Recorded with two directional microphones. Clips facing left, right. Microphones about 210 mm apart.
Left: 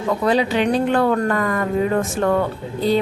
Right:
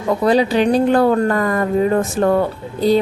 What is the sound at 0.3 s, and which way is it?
A woman's voice, 35° right (ahead or behind).